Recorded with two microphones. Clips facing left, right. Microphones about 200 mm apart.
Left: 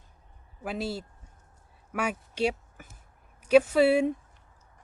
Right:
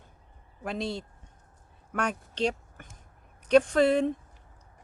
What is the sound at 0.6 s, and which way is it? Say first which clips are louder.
Speech: even; 5° left (ahead or behind).